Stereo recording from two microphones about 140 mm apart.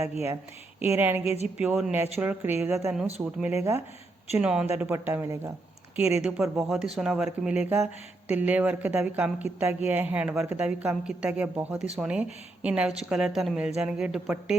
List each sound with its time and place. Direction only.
0.8 s speech: 15° right (ahead or behind)
1.2 s a woman's voice: 50° left (ahead or behind)
1.5 s speech: 10° right (ahead or behind)
2.9 s speech: 5° right (ahead or behind)
3.5 s speech: 20° right (ahead or behind)
4.4 s speech: 5° right (ahead or behind)